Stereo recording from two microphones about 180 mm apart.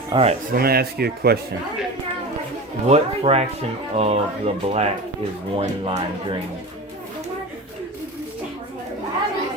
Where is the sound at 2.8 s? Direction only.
35° right (ahead or behind).